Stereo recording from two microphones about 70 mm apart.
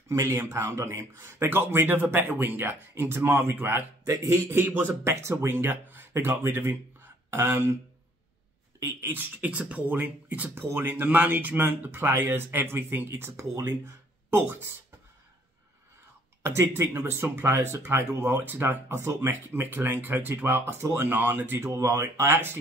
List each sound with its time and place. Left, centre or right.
0.1 s speech: right
8.8 s speech: right
10.5 s speech: right
14.3 s speech: right
16.4 s speech: right
21.5 s speech: right